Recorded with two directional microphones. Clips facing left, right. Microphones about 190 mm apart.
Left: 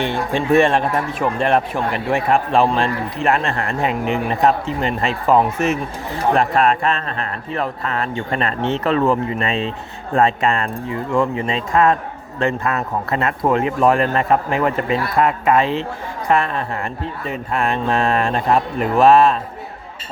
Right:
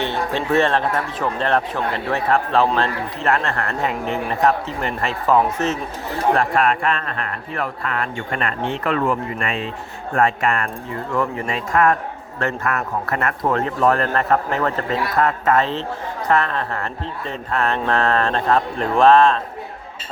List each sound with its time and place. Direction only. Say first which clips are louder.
0.0 s speech: left 2 dB; 10° left (ahead or behind)
6.3 s speech: left 4 dB; 20° left (ahead or behind)